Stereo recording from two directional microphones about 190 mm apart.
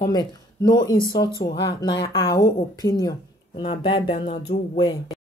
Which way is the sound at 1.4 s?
35° left (ahead or behind).